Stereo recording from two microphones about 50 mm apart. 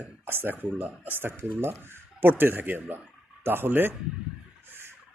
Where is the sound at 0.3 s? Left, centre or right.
Right.